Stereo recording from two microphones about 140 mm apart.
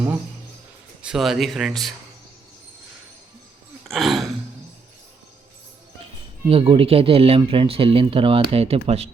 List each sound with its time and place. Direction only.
1.0 s speech: 5° right (ahead or behind)
3.8 s gasp: centre (ahead or behind)
6.5 s speech: 40° right (ahead or behind)